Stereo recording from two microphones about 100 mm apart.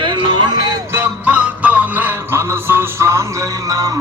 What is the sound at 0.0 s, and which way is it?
Music, 55° right (ahead or behind).